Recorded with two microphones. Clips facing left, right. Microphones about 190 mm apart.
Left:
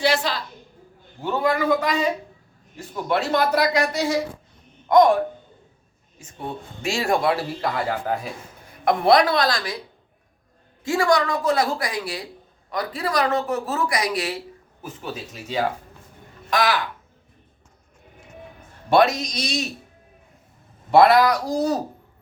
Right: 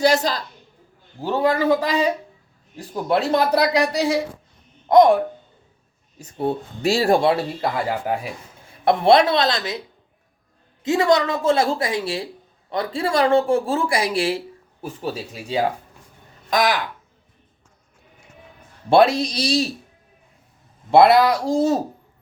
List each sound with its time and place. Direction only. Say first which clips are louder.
0.0 s speech: right 4 dB; 40° right (ahead or behind)
6.1 s speech: right 9 dB; 35° right (ahead or behind); by 8.3 s 10° right (ahead or behind)
8.8 s speech: right 2 dB; 30° right (ahead or behind)
10.8 s speech: right 2 dB; 20° right (ahead or behind)
16.6 s speech: right 2 dB; 15° right (ahead or behind)
18.9 s speech: right 3 dB; 30° right (ahead or behind)
20.9 s speech: right 2 dB; 25° right (ahead or behind)